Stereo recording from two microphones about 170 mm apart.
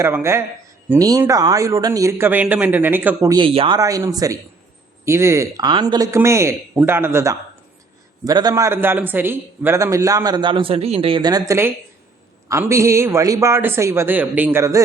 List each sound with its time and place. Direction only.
0.0 s speech: 15° right (ahead or behind)
3.4 s speech: 30° right (ahead or behind)
3.8 s a man's voice: 20° right (ahead or behind)